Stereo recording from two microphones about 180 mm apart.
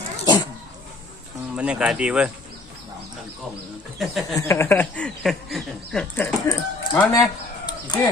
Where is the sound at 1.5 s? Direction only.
5° right (ahead or behind).